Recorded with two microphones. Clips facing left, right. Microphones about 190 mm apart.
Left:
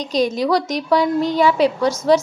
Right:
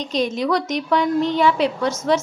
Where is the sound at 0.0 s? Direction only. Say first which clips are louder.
Left 3 dB; 35° left (ahead or behind).